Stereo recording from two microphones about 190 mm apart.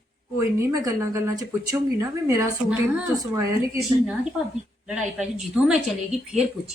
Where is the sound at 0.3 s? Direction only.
15° right (ahead or behind).